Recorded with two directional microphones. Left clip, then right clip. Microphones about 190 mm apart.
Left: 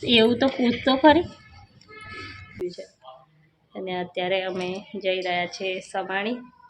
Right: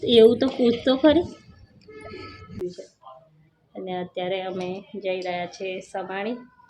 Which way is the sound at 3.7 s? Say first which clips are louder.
Left 1 dB; centre (ahead or behind).